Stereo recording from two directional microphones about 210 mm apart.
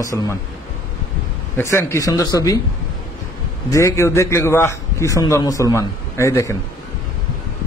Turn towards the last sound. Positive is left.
turn(degrees=15)  # may be behind; listen again after turning